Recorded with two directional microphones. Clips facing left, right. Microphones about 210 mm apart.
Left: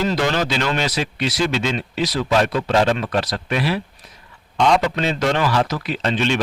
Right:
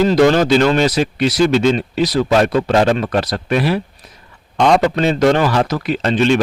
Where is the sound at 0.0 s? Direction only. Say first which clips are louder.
Right 8 dB; 40° right (ahead or behind).